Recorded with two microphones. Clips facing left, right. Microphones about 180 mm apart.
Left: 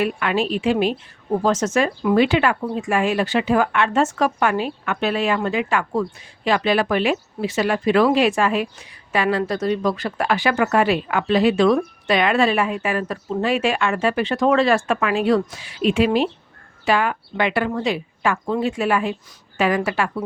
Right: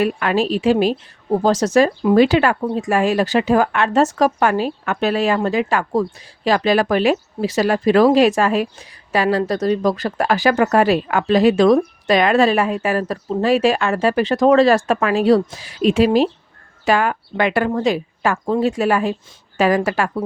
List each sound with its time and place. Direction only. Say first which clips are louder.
0.0 s speech: right 3 dB; 40° right (ahead or behind)